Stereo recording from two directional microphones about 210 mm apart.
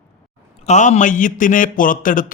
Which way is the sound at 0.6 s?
35° left (ahead or behind).